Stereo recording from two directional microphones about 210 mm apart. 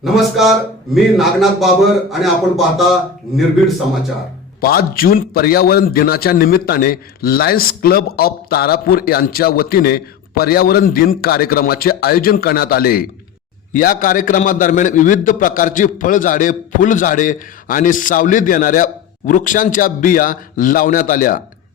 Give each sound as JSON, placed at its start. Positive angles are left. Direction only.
{"t": 0.0, "sound": "a man's voice", "side_deg": 0}
{"t": 4.6, "sound": "a man's voice", "side_deg": 45}